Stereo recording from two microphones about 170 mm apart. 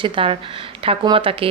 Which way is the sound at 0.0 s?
30° right (ahead or behind).